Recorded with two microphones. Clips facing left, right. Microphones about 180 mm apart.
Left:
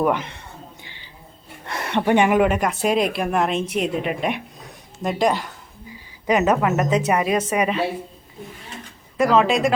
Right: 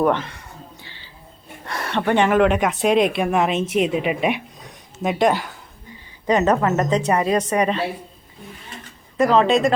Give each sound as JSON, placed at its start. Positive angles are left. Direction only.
{"t": 0.0, "sound": "speech", "side_deg": 10}
{"t": 1.6, "sound": "speech", "side_deg": 20}
{"t": 6.2, "sound": "speech", "side_deg": 10}
{"t": 9.1, "sound": "speech", "side_deg": 0}